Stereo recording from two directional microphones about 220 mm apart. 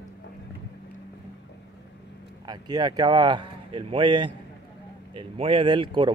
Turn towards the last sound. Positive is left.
turn(degrees=-20)  # may be behind; listen again after turning